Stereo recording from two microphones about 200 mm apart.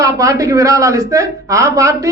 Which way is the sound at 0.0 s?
15° right (ahead or behind).